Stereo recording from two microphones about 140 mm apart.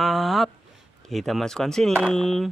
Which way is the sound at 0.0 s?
Centre (ahead or behind).